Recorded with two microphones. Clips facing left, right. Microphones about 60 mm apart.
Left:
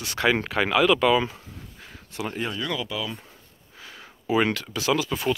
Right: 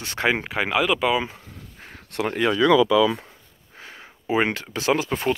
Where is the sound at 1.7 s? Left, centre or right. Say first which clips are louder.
Right 2 dB; right.